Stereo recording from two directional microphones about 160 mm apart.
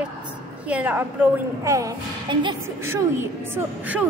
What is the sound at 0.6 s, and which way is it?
A woman's voice, 10° right (ahead or behind).